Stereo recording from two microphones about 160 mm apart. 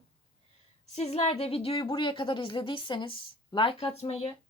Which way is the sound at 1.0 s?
40° left (ahead or behind).